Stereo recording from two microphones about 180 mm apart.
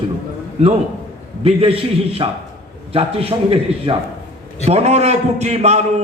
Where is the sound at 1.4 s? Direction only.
30° right (ahead or behind).